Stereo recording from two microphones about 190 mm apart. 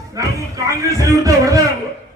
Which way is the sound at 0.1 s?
15° right (ahead or behind).